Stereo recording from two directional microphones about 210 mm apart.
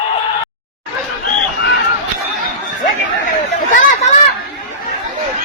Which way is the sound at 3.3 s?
35° left (ahead or behind).